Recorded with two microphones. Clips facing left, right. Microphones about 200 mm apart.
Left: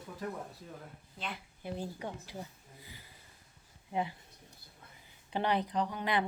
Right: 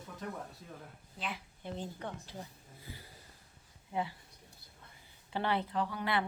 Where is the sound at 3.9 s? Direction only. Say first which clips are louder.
Left 2 dB; 20° left (ahead or behind).